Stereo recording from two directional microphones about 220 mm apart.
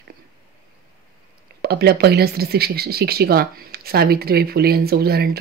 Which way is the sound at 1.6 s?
45° right (ahead or behind).